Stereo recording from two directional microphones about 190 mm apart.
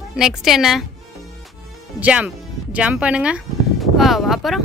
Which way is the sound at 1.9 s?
5° right (ahead or behind).